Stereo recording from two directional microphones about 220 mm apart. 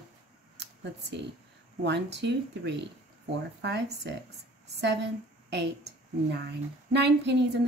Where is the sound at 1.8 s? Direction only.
50° right (ahead or behind).